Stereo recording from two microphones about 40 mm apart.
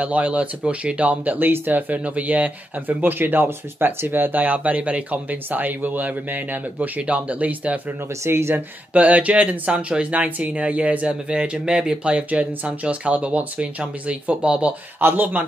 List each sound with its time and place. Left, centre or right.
0.0 s speech: right
3.0 s speech: right
8.3 s speech: right
8.9 s speech: right
11.1 s speech: right
12.0 s speech: right
15.0 s speech: right